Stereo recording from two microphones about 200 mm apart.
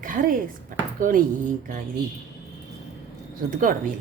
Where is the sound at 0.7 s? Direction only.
45° right (ahead or behind).